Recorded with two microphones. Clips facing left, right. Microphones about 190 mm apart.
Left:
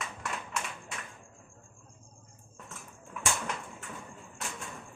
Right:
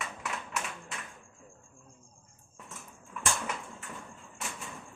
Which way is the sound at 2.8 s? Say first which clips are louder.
Even; centre (ahead or behind).